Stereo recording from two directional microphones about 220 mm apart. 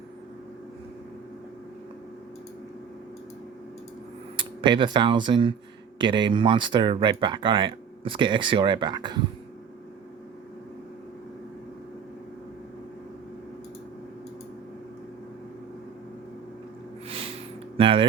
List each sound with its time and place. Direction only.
4.4 s speech: 20° right (ahead or behind)
17.7 s music: 25° right (ahead or behind)